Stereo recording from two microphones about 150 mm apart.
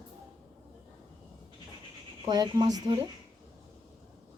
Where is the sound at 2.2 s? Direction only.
25° right (ahead or behind).